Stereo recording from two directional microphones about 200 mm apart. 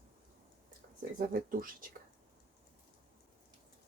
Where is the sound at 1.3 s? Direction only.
45° right (ahead or behind).